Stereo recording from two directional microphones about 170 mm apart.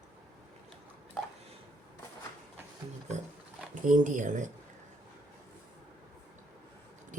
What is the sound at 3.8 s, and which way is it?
Speech, 50° right (ahead or behind).